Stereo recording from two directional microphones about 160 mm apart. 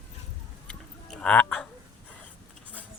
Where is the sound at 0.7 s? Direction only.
5° left (ahead or behind).